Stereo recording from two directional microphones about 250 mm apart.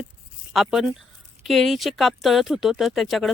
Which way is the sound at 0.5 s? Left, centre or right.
Centre.